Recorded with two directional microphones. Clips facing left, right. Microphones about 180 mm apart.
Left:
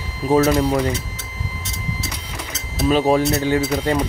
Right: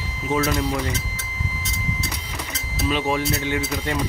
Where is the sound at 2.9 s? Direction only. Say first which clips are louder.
Left 7 dB; 40° left (ahead or behind).